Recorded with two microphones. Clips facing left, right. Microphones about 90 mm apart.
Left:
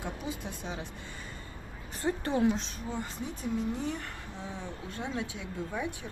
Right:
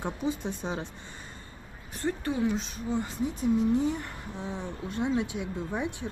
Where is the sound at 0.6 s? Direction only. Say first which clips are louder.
Right 5 dB; 35° right (ahead or behind).